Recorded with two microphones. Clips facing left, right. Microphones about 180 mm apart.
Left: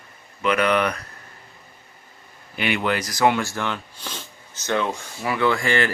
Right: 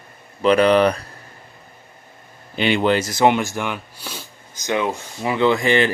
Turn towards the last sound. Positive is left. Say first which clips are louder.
# right 4 dB
turn(degrees=-20)  # may be behind; listen again after turning